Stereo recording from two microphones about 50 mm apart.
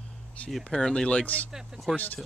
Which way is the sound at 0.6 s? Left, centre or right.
Centre.